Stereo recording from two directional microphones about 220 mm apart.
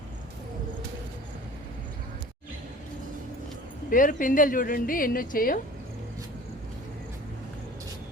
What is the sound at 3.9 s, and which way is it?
A woman's voice, 35° left (ahead or behind).